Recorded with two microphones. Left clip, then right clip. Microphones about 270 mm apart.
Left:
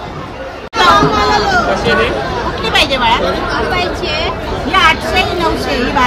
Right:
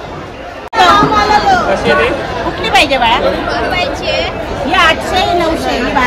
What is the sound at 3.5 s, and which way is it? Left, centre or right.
Chatter, left.